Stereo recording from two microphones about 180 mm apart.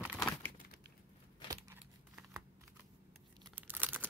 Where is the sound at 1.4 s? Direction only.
25° left (ahead or behind).